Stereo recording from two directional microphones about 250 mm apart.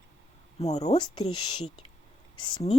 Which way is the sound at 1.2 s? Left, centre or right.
Left.